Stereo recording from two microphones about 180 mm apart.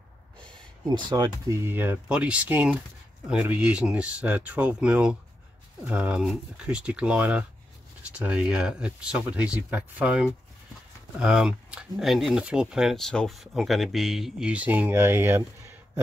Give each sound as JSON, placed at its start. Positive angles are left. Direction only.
{"t": 0.8, "sound": "speech", "side_deg": -25}